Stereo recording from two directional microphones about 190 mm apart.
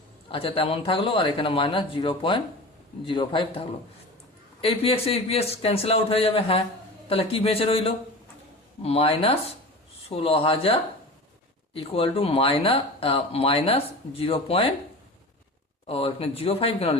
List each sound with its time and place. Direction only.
0.3 s a man's voice: 30° left (ahead or behind)
15.9 s a man's voice: 30° left (ahead or behind)